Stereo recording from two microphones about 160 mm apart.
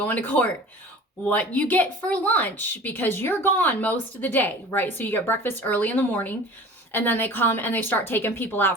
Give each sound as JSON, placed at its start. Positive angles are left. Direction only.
{"t": 0.0, "sound": "a woman's voice", "side_deg": 10}